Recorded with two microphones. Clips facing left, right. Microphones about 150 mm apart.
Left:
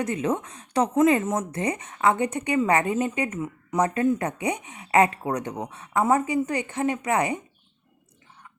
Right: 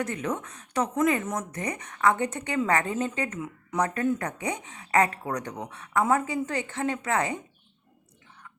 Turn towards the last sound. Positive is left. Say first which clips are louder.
# left 3 dB
turn(degrees=15)  # may be behind; listen again after turning